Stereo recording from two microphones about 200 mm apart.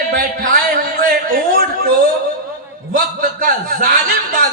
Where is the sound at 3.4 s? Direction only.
45° right (ahead or behind).